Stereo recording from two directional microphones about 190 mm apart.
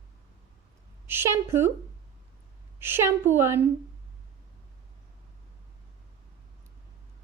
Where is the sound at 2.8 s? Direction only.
15° right (ahead or behind).